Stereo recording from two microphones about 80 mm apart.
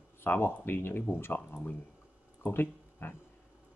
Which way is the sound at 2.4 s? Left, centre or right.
Left.